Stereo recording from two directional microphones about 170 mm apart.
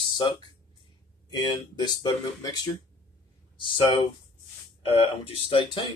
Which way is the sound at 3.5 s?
30° left (ahead or behind).